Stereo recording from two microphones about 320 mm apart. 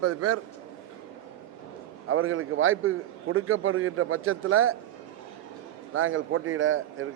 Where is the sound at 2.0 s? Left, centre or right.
Right.